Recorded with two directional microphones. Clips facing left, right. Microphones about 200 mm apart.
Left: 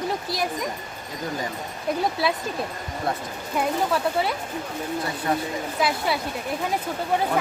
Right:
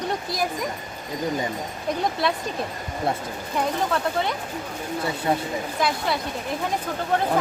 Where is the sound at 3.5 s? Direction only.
5° left (ahead or behind).